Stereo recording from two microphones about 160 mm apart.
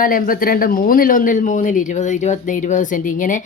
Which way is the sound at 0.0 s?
60° left (ahead or behind).